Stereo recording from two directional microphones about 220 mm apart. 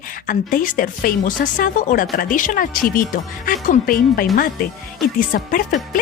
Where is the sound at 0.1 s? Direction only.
40° left (ahead or behind).